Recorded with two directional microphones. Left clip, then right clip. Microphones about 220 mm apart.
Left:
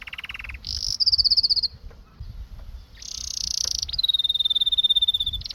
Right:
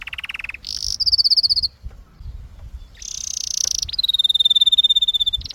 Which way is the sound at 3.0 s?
10° right (ahead or behind).